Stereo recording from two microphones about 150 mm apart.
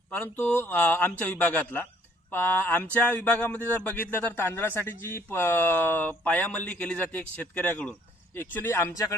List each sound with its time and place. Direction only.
0.1 s speech: 10° left (ahead or behind)